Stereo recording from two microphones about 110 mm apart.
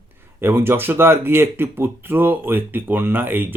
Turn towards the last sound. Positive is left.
turn(degrees=-20)  # may be behind; listen again after turning